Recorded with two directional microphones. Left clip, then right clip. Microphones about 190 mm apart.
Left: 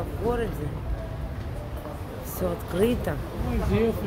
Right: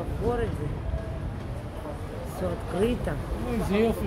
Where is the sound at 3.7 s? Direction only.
55° right (ahead or behind).